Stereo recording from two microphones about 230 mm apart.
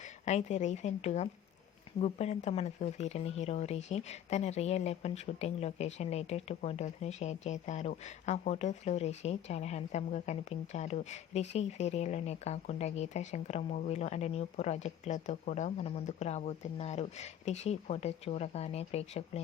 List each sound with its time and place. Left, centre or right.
0.3 s speech: left